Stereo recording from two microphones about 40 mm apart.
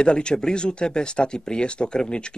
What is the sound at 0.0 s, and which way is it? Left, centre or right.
Speech, left.